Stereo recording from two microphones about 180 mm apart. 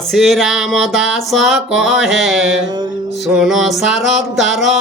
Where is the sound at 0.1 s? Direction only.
Centre (ahead or behind).